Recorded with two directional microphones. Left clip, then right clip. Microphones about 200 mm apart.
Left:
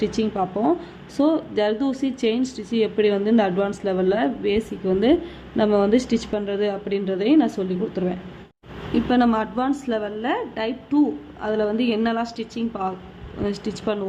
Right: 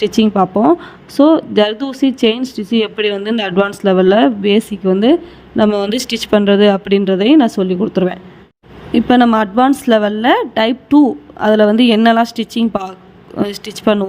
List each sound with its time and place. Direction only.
0.0 s speech: 40° right (ahead or behind)